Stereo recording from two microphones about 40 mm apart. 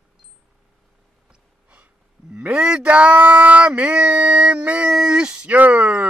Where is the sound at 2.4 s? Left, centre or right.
Right.